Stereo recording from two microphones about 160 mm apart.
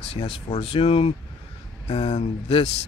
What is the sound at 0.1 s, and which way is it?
Speech, 40° left (ahead or behind).